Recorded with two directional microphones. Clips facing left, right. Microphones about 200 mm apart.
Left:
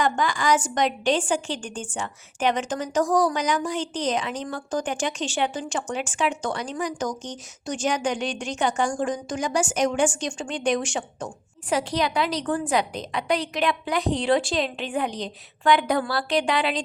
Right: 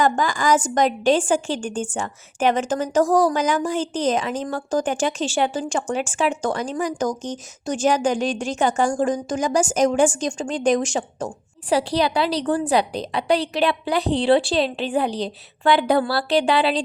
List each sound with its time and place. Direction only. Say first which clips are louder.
0.0 s a woman's voice: right 3 dB; 45° right (ahead or behind)